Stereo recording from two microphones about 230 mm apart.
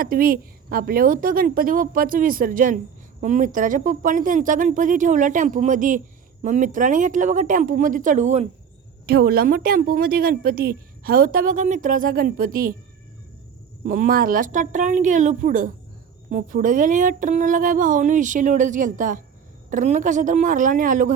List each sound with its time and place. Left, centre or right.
0.0 s a woman's voice: right
9.0 s a woman's voice: right
13.8 s a woman's voice: right